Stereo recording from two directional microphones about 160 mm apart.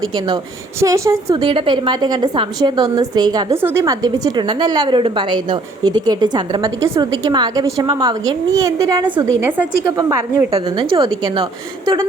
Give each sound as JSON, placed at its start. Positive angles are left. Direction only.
{"t": 0.0, "sound": "a woman's voice", "side_deg": -25}